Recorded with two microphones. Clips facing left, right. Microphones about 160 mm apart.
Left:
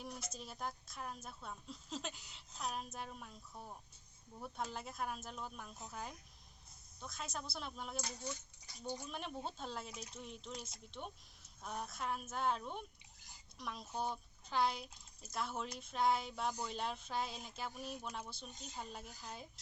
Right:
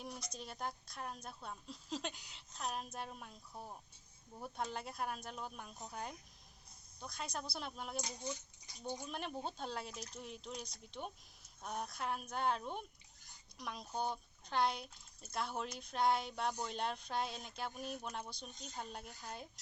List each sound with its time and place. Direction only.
0.0 s speech: 5° left (ahead or behind)
4.4 s speech: centre (ahead or behind)
8.0 s speech: 20° right (ahead or behind)
9.0 s speech: centre (ahead or behind)